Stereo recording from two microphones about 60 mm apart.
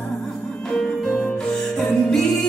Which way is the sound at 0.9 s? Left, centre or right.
Centre.